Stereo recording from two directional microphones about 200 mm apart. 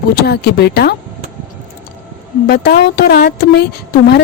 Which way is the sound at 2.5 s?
50° left (ahead or behind).